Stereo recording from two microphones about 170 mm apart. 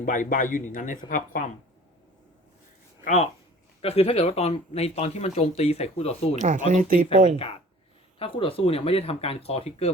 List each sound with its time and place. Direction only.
0.0 s speech: 50° left (ahead or behind)
3.0 s speech: 45° left (ahead or behind)
6.3 s speech: 45° right (ahead or behind)
8.2 s speech: 30° left (ahead or behind)